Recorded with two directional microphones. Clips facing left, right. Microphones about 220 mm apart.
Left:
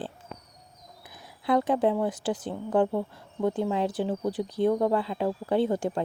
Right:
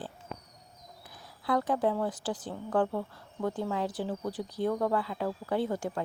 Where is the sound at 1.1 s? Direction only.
20° left (ahead or behind).